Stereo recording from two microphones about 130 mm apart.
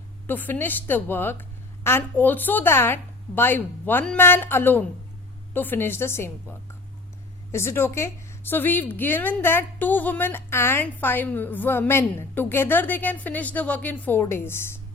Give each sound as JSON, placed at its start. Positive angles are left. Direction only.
{"t": 0.3, "sound": "a woman's voice", "side_deg": 15}
{"t": 7.5, "sound": "a woman's voice", "side_deg": 20}